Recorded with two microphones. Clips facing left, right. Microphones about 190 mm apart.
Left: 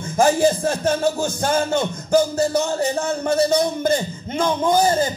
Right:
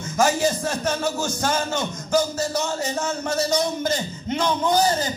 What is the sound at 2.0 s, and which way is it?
Music, 55° left (ahead or behind).